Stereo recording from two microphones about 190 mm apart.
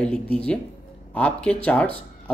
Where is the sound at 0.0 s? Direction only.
5° left (ahead or behind).